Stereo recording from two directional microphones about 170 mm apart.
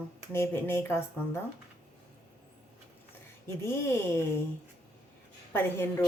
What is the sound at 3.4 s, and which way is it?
Speech, 15° left (ahead or behind).